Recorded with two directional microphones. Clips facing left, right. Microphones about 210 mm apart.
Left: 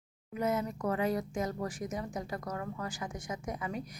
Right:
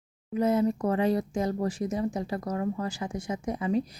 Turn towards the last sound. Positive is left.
turn(degrees=-30)  # may be behind; listen again after turning